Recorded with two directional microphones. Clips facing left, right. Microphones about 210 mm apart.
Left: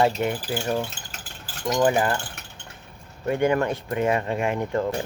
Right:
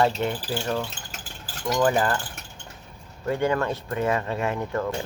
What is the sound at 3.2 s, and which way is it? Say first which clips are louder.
Speech: left 2 dB; 15° left (ahead or behind).